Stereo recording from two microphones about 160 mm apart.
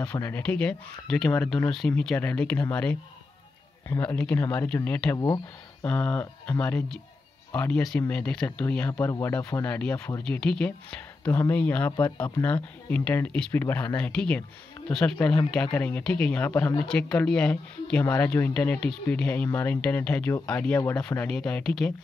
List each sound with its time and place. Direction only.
0.0 s speech: 10° left (ahead or behind)
5.1 s speech: 25° left (ahead or behind)
5.9 s speech: 10° left (ahead or behind)
8.9 s speech: 20° left (ahead or behind)
9.9 s speech: 20° left (ahead or behind)
10.2 s speech: 5° left (ahead or behind)